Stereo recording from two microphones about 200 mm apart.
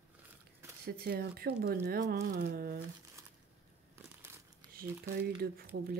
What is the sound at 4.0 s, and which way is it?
Crumpling, 15° right (ahead or behind).